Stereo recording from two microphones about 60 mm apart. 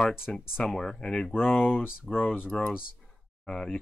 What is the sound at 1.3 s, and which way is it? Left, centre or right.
Speech, left.